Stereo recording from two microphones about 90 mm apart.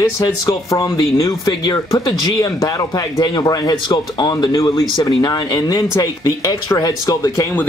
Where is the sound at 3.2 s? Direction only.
45° left (ahead or behind).